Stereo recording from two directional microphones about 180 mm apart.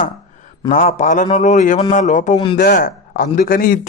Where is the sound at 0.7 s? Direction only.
40° left (ahead or behind).